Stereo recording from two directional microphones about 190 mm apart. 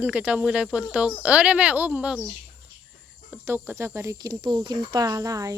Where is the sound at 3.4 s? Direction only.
10° right (ahead or behind).